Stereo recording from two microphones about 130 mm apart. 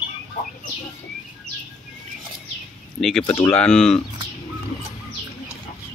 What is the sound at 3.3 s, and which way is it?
Speech, 20° left (ahead or behind).